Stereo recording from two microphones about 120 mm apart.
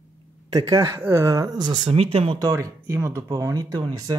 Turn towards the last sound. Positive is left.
turn(degrees=-35)  # may be behind; listen again after turning